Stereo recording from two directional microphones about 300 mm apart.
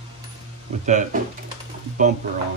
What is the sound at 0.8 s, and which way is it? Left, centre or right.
Speech, right.